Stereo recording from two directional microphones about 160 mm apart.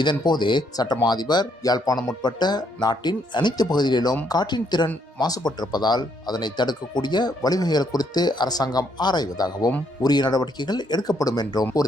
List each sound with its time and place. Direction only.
0.0 s speech: 30° left (ahead or behind)